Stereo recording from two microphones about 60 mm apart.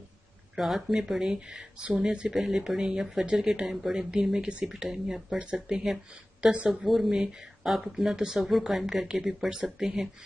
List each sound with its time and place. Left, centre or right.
0.6 s speech: centre
6.7 s speech: centre